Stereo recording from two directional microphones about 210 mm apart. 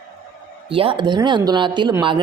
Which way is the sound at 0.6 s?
25° right (ahead or behind).